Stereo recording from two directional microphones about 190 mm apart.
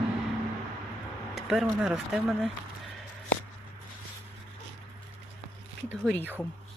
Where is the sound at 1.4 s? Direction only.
Centre (ahead or behind).